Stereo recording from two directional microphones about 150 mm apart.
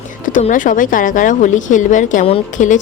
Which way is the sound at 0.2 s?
60° left (ahead or behind).